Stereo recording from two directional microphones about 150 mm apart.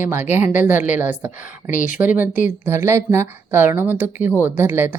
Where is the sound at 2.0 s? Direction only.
10° right (ahead or behind).